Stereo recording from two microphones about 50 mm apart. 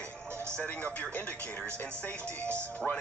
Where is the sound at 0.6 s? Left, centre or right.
Left.